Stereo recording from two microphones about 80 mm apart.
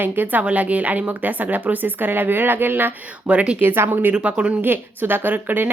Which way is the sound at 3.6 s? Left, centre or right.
Right.